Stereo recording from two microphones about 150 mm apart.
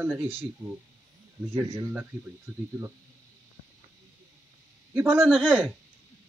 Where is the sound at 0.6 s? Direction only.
25° right (ahead or behind).